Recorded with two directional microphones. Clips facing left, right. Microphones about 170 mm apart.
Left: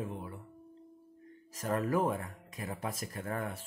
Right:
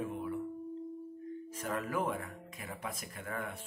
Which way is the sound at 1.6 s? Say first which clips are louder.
Left 5 dB; 35° left (ahead or behind).